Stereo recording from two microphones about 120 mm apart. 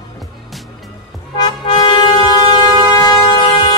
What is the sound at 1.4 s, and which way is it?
Music, 40° left (ahead or behind).